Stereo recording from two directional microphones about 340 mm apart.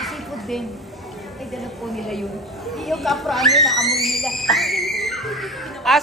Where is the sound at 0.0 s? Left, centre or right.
Centre.